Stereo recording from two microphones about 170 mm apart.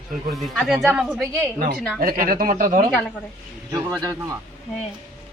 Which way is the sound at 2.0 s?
55° right (ahead or behind).